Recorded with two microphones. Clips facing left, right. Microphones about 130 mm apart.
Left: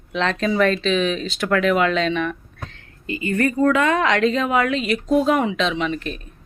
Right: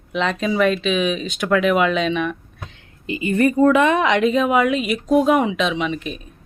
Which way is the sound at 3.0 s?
20° right (ahead or behind).